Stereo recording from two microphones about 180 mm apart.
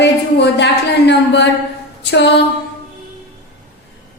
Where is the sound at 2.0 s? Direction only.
75° left (ahead or behind).